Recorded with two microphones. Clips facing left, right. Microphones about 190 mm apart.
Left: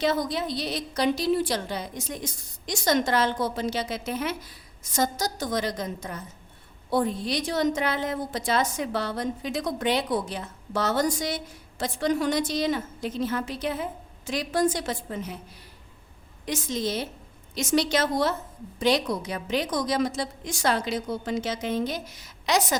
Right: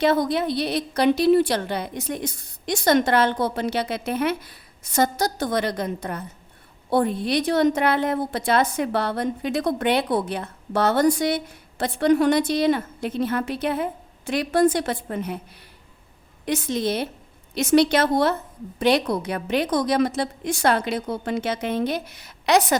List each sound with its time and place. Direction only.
0.0 s a woman's voice: 60° right (ahead or behind)
16.5 s a woman's voice: 60° right (ahead or behind)